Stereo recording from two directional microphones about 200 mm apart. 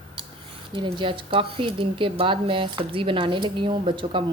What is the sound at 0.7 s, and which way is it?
Speech, 25° right (ahead or behind).